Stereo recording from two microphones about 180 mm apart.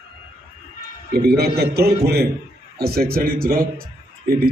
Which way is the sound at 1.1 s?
60° right (ahead or behind).